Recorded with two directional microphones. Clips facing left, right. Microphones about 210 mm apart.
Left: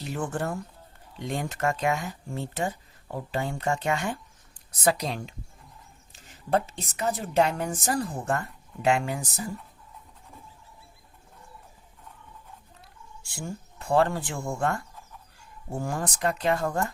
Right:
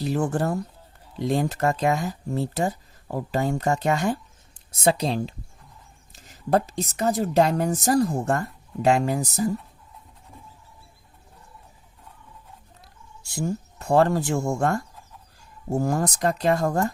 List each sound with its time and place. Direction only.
0.0 s a woman's voice: 35° right (ahead or behind)
4.5 s a woman's voice: 25° right (ahead or behind)
13.2 s a woman's voice: 40° right (ahead or behind)